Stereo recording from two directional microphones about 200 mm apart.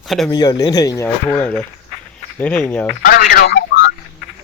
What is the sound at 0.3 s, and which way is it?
Speech, 20° left (ahead or behind).